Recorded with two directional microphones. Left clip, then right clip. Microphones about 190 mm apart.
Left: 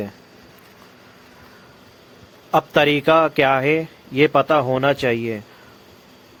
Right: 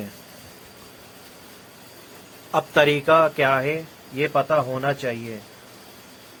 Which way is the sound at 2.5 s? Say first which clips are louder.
Left 2 dB; 40° left (ahead or behind).